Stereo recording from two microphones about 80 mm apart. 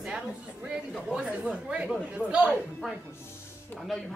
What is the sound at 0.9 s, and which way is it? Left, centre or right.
Speech, centre.